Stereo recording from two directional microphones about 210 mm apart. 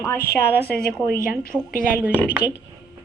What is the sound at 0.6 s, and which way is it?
A woman's voice, 45° left (ahead or behind).